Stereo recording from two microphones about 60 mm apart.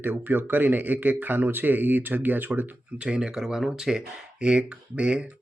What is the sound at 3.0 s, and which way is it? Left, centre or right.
Speech, centre.